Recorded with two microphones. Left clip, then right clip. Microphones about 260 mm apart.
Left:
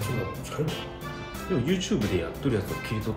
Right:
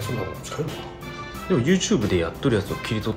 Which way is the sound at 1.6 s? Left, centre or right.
Right.